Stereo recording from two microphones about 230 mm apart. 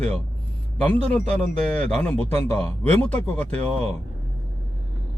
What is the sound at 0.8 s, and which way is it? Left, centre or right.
A man's voice, centre.